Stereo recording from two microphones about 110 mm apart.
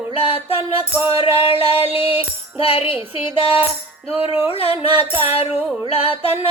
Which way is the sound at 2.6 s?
60° left (ahead or behind).